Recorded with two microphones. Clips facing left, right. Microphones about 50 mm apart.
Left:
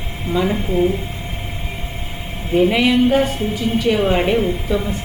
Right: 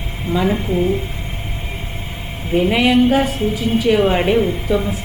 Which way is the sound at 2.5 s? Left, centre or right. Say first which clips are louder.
Even; centre.